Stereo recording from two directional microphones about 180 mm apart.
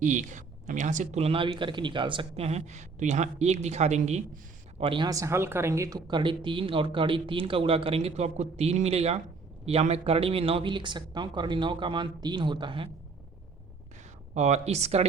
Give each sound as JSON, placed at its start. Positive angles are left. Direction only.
{"t": 0.0, "sound": "speech", "side_deg": -45}
{"t": 4.8, "sound": "speech", "side_deg": -30}
{"t": 14.3, "sound": "speech", "side_deg": -40}